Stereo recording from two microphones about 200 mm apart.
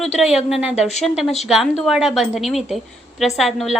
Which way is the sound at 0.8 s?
35° left (ahead or behind).